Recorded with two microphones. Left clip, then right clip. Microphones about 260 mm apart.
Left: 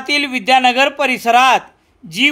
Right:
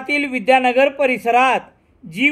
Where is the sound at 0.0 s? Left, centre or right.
Left.